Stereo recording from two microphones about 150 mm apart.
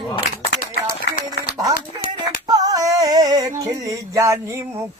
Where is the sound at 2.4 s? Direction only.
25° right (ahead or behind).